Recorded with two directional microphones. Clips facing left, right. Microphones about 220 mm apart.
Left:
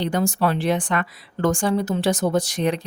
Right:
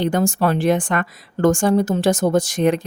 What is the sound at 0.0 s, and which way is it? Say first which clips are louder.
Speech: right 3 dB; 45° right (ahead or behind).